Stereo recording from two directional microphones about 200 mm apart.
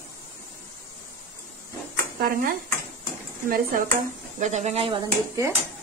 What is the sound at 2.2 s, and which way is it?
Speech, 45° right (ahead or behind).